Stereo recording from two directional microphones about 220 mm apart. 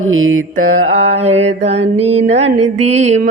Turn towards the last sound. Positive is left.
turn(degrees=-30)  # may be behind; listen again after turning